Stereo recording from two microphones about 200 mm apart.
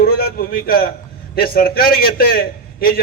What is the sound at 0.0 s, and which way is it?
A man's voice, 50° left (ahead or behind).